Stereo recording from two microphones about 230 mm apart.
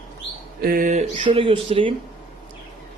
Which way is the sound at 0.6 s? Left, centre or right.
Right.